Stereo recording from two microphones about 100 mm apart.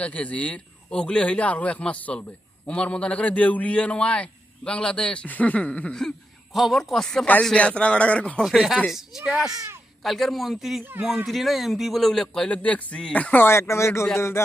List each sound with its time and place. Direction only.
0.0 s a man's voice: 15° left (ahead or behind)
8.5 s speech: 5° right (ahead or behind)
9.2 s speech: 15° right (ahead or behind)
10.0 s speech: centre (ahead or behind)
12.4 s a man's voice: 15° left (ahead or behind)